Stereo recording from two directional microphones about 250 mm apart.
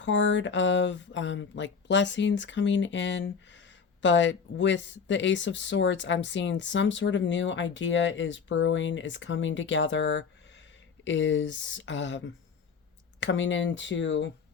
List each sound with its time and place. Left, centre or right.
0.0 s speech: left